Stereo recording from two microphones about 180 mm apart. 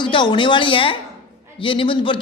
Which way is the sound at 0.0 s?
25° left (ahead or behind).